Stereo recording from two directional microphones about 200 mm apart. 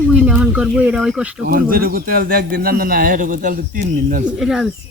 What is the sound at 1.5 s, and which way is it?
A man's voice, 45° right (ahead or behind).